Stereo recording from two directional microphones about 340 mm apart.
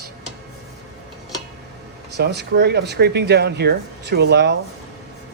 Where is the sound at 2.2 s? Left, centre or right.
Right.